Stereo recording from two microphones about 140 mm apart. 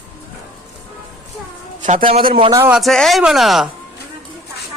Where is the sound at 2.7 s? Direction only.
Centre (ahead or behind).